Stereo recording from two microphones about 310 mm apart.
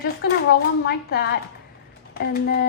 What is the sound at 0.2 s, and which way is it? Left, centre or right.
Speech, left.